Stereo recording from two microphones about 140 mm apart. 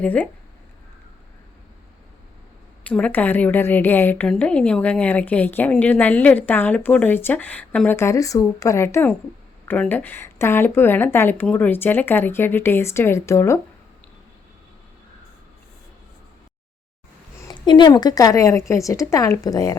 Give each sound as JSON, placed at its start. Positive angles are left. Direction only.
{"t": 0.0, "sound": "a woman's voice", "side_deg": 10}
{"t": 2.8, "sound": "a woman's voice", "side_deg": 10}
{"t": 17.5, "sound": "speech", "side_deg": 35}